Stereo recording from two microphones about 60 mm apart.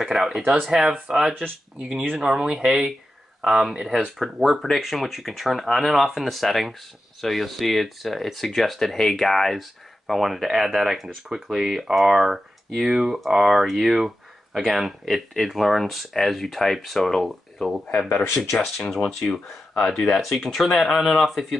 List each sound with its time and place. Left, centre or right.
0.0 s speech: centre